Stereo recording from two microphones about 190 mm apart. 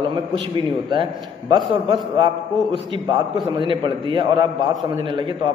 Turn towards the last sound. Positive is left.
turn(degrees=-25)  # may be behind; listen again after turning